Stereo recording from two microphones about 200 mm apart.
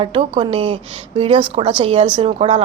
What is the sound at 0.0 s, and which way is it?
Speech, 25° right (ahead or behind).